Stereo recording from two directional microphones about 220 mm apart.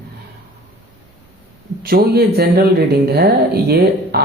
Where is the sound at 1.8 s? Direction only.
45° right (ahead or behind).